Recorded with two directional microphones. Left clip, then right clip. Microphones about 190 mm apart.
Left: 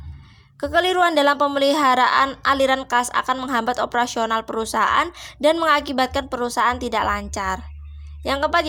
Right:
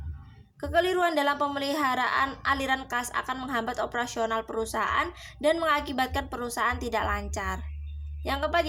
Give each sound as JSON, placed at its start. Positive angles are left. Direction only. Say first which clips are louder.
{"t": 0.6, "sound": "a woman's voice", "louder": "left 7 dB", "side_deg": 45}